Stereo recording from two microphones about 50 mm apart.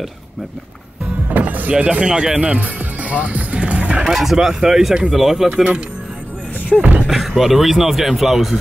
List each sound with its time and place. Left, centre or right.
1.3 s music: right
2.0 s speech: centre
2.4 s speech: right
4.0 s speech: centre
5.5 s speech: right
6.8 s speech: right
7.1 s speech: centre